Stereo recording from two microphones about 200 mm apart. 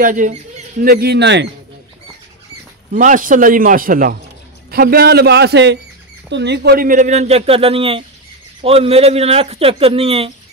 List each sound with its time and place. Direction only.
0.0 s speech: 40° right (ahead or behind); by 1.5 s 60° right (ahead or behind)
2.9 s speech: 40° right (ahead or behind)